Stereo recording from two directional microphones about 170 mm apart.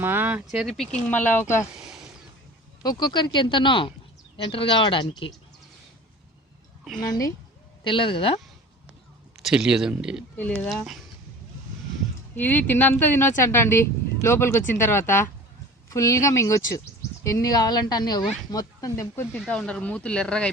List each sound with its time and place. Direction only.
0.0 s speech: 10° right (ahead or behind); by 1.6 s 15° left (ahead or behind)
2.8 s speech: 25° left (ahead or behind)
7.1 s speech: 20° left (ahead or behind)
7.9 s speech: 30° left (ahead or behind)
9.4 s speech: 5° right (ahead or behind)
10.3 s speech: 10° left (ahead or behind)
12.4 s speech: 10° left (ahead or behind)